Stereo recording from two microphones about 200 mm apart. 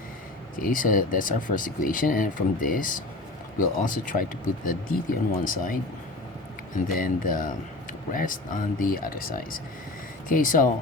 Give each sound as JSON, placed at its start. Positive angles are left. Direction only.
{"t": 0.6, "sound": "speech", "side_deg": 45}
{"t": 6.8, "sound": "speech", "side_deg": 45}